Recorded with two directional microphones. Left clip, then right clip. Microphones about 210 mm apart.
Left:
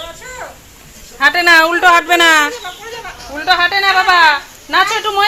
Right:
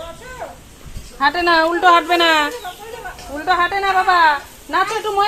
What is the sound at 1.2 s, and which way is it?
Speech, 35° left (ahead or behind).